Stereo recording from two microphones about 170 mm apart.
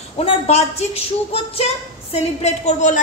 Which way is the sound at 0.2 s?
35° left (ahead or behind).